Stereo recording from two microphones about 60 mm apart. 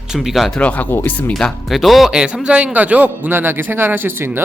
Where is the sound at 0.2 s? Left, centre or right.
Centre.